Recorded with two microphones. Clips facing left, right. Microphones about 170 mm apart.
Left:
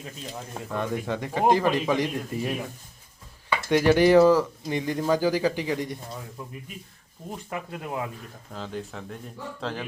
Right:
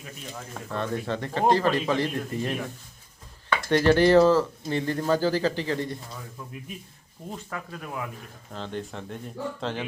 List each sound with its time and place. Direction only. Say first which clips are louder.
0.3 s speech: left 1 dB; 15° left (ahead or behind)
7.5 s speech: left 5 dB; 20° left (ahead or behind)
8.5 s speech: right 1 dB; 5° left (ahead or behind)